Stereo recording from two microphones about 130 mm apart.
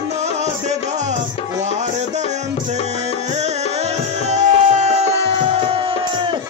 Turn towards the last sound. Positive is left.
turn(degrees=-60)  # may be behind; listen again after turning